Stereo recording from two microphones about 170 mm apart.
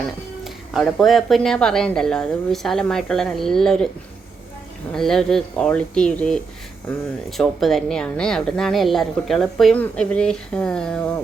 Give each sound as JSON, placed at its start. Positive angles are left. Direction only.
{"t": 0.4, "sound": "a woman's voice", "side_deg": 0}
{"t": 4.9, "sound": "a woman's voice", "side_deg": 0}